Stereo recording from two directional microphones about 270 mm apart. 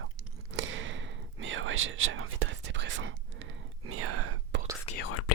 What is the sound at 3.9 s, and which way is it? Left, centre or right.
Whispering, right.